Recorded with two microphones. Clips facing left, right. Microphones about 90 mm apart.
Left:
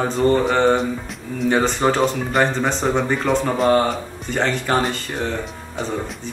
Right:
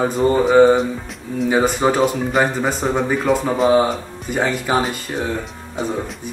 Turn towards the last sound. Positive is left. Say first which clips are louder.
# right 1 dB
turn(degrees=-5)  # may be behind; listen again after turning